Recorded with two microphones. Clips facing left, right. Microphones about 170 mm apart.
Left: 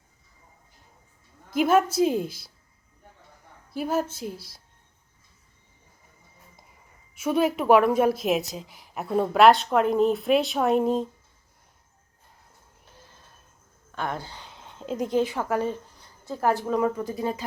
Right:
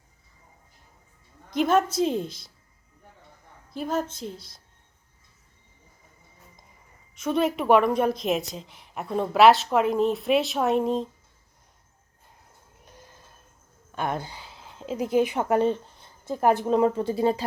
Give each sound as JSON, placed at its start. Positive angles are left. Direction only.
{"t": 1.5, "sound": "a woman's voice", "side_deg": 5}
{"t": 3.7, "sound": "a woman's voice", "side_deg": 5}
{"t": 7.2, "sound": "a woman's voice", "side_deg": 5}
{"t": 13.9, "sound": "speech", "side_deg": -15}
{"t": 14.3, "sound": "a sound", "side_deg": -5}
{"t": 15.2, "sound": "speech", "side_deg": -20}